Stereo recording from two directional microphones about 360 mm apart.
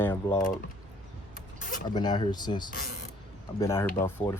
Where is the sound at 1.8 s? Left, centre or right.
Centre.